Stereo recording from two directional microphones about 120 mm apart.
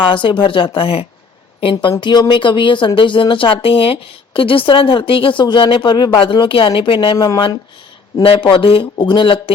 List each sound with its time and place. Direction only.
0.0 s speech: 45° left (ahead or behind)